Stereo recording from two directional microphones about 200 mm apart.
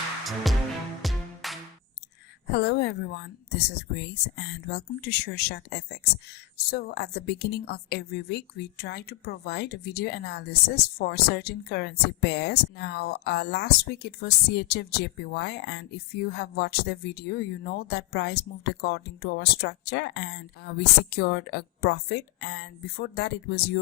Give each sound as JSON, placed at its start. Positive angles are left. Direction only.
{"t": 0.4, "sound": "music", "side_deg": 0}
{"t": 2.5, "sound": "a woman's voice", "side_deg": 55}